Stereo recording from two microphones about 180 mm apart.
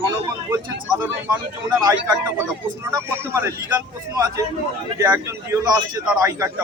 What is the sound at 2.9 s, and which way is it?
Speech, 15° right (ahead or behind).